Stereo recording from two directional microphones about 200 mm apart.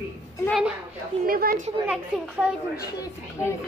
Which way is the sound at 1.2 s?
45° right (ahead or behind).